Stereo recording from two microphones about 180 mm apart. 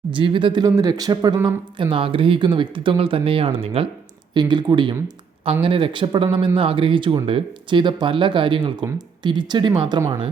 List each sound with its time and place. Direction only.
0.1 s speech: 30° right (ahead or behind)